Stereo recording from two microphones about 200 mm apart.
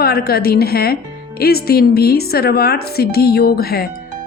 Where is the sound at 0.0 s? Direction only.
50° left (ahead or behind).